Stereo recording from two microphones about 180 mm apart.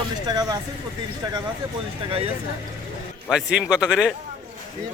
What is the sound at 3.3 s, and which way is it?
Speech, 5° right (ahead or behind).